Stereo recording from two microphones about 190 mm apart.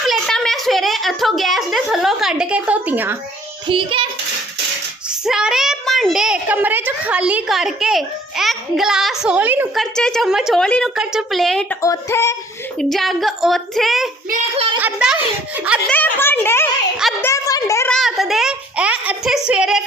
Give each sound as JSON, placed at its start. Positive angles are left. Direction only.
{"t": 0.0, "sound": "a sound", "side_deg": 0}
{"t": 3.7, "sound": "child singing", "side_deg": -25}
{"t": 5.2, "sound": "a child's voice", "side_deg": -5}
{"t": 9.8, "sound": "a child's voice", "side_deg": 5}
{"t": 11.8, "sound": "a child's voice", "side_deg": 15}
{"t": 12.9, "sound": "a child's voice", "side_deg": 0}
{"t": 15.9, "sound": "a child's voice", "side_deg": 10}
{"t": 17.2, "sound": "a sound", "side_deg": 15}
{"t": 17.9, "sound": "a sound", "side_deg": 0}